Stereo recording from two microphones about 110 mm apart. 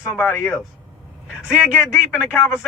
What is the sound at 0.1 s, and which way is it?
Speech, 20° left (ahead or behind).